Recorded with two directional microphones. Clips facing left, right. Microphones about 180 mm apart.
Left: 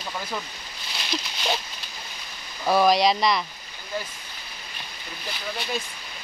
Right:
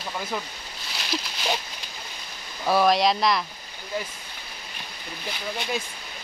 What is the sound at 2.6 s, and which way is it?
Speech, centre (ahead or behind).